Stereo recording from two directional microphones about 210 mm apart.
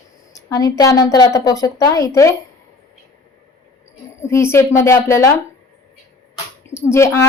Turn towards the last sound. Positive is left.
turn(degrees=10)  # may be behind; listen again after turning